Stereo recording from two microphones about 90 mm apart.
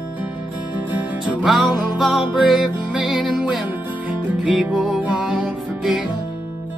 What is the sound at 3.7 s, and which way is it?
Music, 20° right (ahead or behind).